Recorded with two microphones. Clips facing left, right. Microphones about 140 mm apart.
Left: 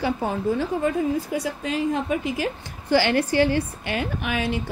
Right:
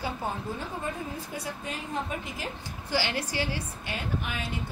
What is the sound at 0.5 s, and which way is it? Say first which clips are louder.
Speech: left 11 dB; 90° left.